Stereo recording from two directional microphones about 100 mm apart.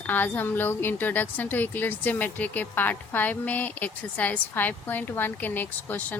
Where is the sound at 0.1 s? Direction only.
20° left (ahead or behind).